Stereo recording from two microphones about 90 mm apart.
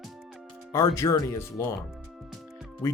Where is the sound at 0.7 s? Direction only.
30° left (ahead or behind).